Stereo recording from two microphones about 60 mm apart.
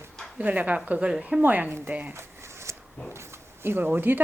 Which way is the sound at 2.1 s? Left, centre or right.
Right.